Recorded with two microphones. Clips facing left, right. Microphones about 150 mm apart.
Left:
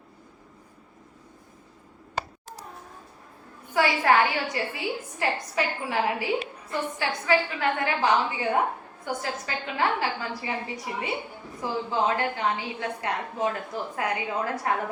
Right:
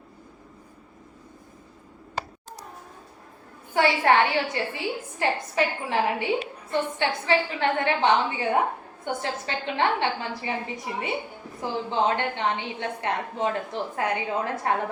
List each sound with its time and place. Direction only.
3.8 s a woman's voice: 30° right (ahead or behind)